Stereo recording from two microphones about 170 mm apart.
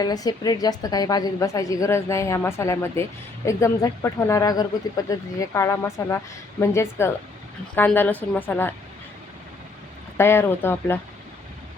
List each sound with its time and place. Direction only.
0.0 s a woman's voice: 20° left (ahead or behind)
10.2 s speech: 15° left (ahead or behind)